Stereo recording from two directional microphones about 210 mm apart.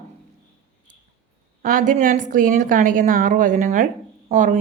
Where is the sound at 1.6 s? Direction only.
40° right (ahead or behind).